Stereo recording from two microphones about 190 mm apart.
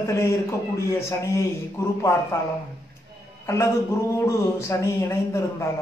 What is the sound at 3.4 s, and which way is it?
A man's voice, 15° left (ahead or behind).